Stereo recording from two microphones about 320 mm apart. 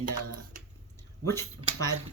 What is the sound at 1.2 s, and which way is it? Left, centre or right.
Speech, centre.